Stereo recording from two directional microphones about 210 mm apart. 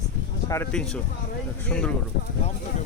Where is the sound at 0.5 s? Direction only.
5° left (ahead or behind).